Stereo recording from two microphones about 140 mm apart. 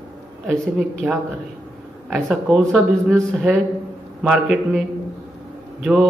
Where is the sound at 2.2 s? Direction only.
Centre (ahead or behind).